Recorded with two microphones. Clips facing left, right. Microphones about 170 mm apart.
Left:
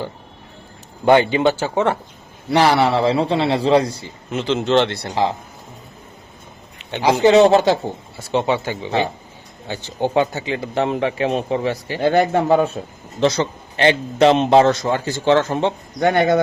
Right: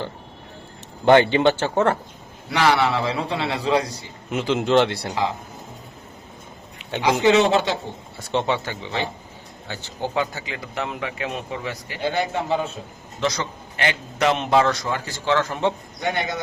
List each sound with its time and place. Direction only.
1.4 s speech: 10° left (ahead or behind)
2.5 s a man's voice: 35° left (ahead or behind)
4.3 s speech: 10° right (ahead or behind)
7.0 s a man's voice: 35° left (ahead or behind)
8.3 s a man's voice: 5° left (ahead or behind); by 11.9 s 30° left (ahead or behind)
12.0 s speech: 50° left (ahead or behind)
13.1 s a man's voice: 30° left (ahead or behind)
16.0 s speech: 55° left (ahead or behind)